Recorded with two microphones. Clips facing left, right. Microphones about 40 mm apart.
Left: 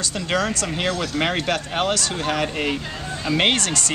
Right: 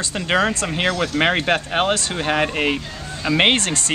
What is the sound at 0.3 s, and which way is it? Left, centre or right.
Speech, right.